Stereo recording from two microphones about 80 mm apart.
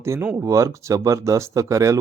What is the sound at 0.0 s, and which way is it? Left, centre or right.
Speech, right.